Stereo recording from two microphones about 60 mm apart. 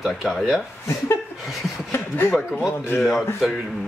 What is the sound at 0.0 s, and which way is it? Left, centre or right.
Speech, centre.